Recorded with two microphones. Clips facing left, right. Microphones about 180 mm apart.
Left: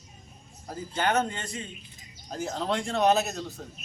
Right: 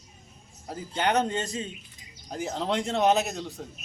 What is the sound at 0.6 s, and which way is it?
A man's voice, 20° right (ahead or behind).